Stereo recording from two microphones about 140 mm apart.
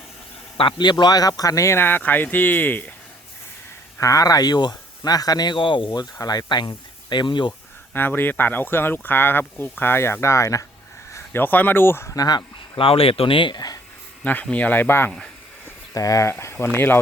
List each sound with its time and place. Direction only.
0.5 s speech: 35° left (ahead or behind); by 2.9 s 15° left (ahead or behind)
4.0 s speech: 25° left (ahead or behind)
7.9 s speech: 15° left (ahead or behind); by 13.7 s 30° left (ahead or behind)
14.3 s speech: 10° left (ahead or behind)